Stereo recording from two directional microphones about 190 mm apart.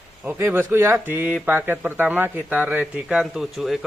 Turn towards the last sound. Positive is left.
turn(degrees=0)  # may be behind; listen again after turning